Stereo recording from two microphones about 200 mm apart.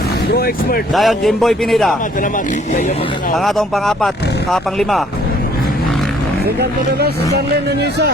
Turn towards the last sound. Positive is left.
turn(degrees=-55)  # may be behind; listen again after turning